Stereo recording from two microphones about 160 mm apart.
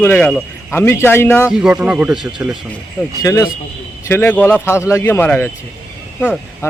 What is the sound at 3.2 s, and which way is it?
A man's voice, 20° left (ahead or behind).